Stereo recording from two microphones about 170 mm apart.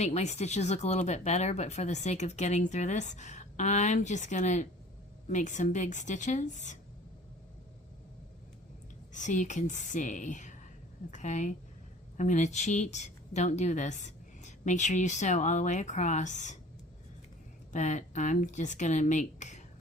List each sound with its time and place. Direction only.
0.0 s speech: 40° left (ahead or behind)
9.1 s speech: 45° left (ahead or behind)
17.7 s speech: 45° left (ahead or behind)
19.4 s a sound: 45° left (ahead or behind)